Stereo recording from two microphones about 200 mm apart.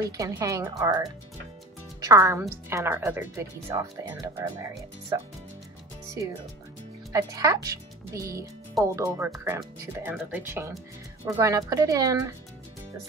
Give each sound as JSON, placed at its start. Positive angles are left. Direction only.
{"t": 0.2, "sound": "speech", "side_deg": -15}
{"t": 7.1, "sound": "speech", "side_deg": -15}